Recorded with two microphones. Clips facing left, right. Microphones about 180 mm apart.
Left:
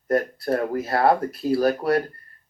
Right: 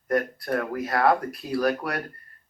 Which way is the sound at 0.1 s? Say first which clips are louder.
Left 3 dB; 30° left (ahead or behind).